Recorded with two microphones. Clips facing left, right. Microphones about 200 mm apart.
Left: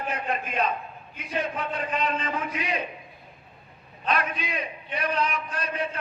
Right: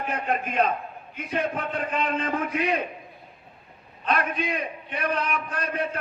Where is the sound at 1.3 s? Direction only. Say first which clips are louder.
Right 2 dB; 55° right (ahead or behind).